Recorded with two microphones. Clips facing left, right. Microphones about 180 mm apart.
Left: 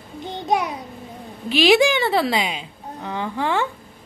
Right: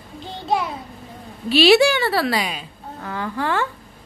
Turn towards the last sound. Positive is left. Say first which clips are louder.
# left 1 dB
turn(degrees=15)  # may be behind; listen again after turning